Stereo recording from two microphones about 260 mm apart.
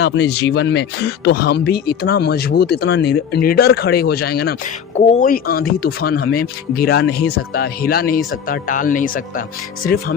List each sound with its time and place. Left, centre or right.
0.0 s speech: left